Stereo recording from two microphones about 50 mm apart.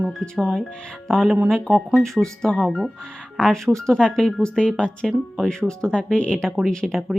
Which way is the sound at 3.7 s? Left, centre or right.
Centre.